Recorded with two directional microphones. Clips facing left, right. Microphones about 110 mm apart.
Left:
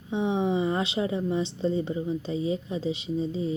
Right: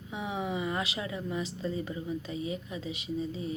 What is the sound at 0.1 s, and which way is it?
A woman's voice, 30° left (ahead or behind).